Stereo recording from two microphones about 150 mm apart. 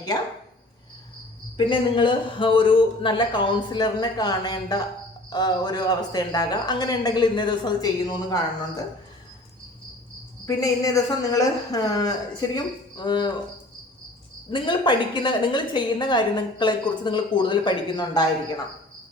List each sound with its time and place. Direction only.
1.5 s a woman's voice: 35° left (ahead or behind)
10.4 s speech: 25° left (ahead or behind)
14.5 s a woman's voice: 30° left (ahead or behind)